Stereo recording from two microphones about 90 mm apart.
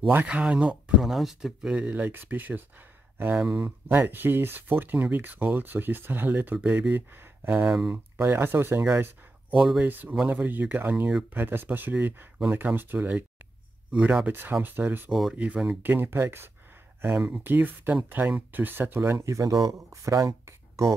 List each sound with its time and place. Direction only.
0.3 s speech: 10° right (ahead or behind)
9.5 s speech: 10° right (ahead or behind)
9.8 s speech: 20° right (ahead or behind)
14.2 s speech: 20° right (ahead or behind)
15.0 s speech: centre (ahead or behind)
15.3 s speech: 15° right (ahead or behind); by 20.9 s 35° right (ahead or behind)